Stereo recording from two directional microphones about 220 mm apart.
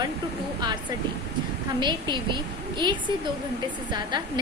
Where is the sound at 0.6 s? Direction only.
20° right (ahead or behind).